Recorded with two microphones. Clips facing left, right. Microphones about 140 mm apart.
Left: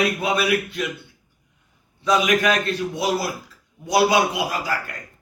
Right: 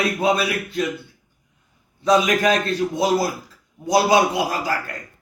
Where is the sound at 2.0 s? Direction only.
35° right (ahead or behind).